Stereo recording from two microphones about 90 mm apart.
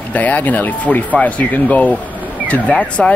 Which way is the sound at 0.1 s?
15° left (ahead or behind).